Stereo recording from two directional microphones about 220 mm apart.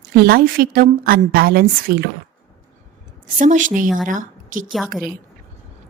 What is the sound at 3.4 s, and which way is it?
Speech, 35° right (ahead or behind).